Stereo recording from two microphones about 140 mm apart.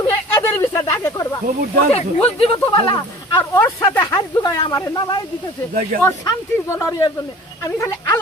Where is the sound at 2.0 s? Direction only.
40° left (ahead or behind).